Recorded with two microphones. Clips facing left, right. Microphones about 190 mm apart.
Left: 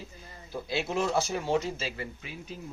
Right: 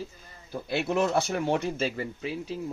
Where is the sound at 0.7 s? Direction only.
60° right (ahead or behind).